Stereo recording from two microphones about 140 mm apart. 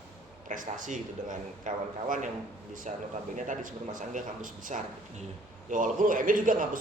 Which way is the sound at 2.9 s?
55° right (ahead or behind).